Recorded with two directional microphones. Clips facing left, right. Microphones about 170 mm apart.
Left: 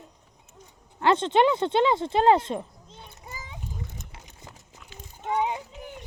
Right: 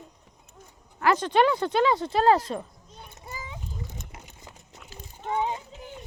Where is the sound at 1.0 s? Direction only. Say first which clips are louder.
Left 1 dB; 25° left (ahead or behind).